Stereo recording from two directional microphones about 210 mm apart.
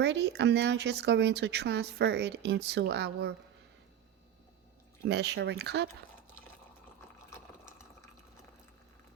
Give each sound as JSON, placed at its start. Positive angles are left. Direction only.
{"t": 0.0, "sound": "speech", "side_deg": -55}
{"t": 5.0, "sound": "speech", "side_deg": -50}